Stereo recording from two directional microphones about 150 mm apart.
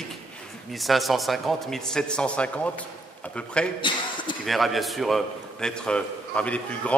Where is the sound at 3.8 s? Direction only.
30° left (ahead or behind).